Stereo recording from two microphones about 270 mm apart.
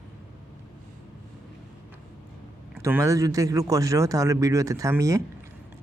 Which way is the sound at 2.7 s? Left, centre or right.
Centre.